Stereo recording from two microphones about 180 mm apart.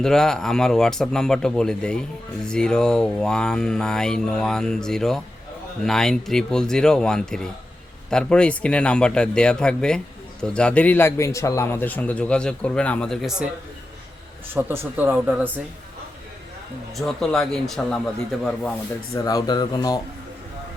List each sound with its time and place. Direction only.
0.0 s a man's voice: 5° left (ahead or behind)
14.5 s speech: 10° right (ahead or behind)
17.0 s speech: centre (ahead or behind)
19.1 s speech: 20° left (ahead or behind)